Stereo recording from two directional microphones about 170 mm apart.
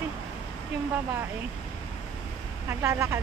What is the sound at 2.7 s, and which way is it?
Speech, 15° right (ahead or behind).